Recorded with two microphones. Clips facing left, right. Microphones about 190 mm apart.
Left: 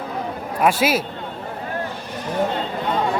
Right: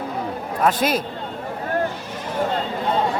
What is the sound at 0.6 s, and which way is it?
Speech, 10° left (ahead or behind).